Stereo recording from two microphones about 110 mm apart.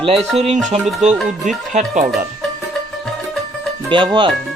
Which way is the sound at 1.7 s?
90° right.